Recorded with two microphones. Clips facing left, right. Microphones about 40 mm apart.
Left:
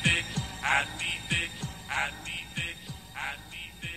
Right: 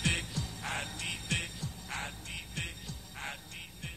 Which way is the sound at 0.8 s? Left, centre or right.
Left.